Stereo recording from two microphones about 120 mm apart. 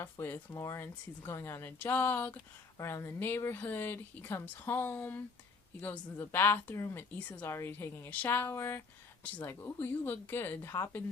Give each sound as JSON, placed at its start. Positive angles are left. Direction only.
{"t": 0.0, "sound": "a woman's voice", "side_deg": 15}